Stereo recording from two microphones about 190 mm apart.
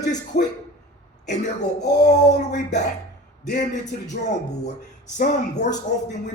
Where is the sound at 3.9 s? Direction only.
40° left (ahead or behind).